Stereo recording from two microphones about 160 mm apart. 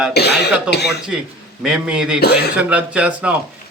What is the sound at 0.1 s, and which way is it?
Speech, 90° left.